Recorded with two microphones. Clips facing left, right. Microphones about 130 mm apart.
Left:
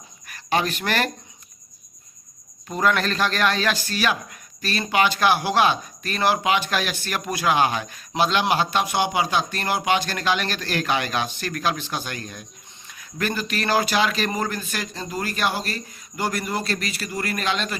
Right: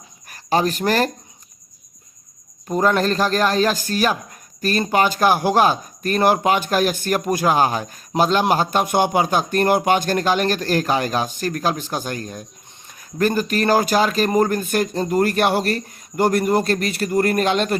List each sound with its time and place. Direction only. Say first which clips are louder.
0.3 s speech: right 4 dB; 40° right (ahead or behind)
2.6 s a man's voice: right 4 dB; 35° right (ahead or behind)